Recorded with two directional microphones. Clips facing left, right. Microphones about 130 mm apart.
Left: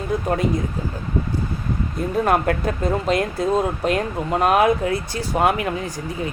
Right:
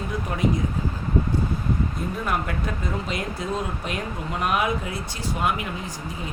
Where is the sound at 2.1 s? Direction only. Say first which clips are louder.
Left 11 dB; 50° left (ahead or behind).